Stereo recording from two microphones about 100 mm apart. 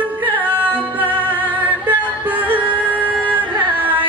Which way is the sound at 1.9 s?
15° right (ahead or behind).